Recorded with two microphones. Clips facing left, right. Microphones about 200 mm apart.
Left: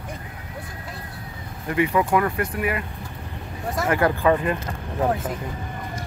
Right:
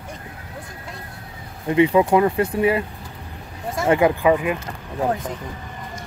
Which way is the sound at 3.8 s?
25° right (ahead or behind).